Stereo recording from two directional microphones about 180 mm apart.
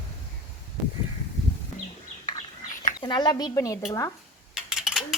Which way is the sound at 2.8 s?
25° left (ahead or behind).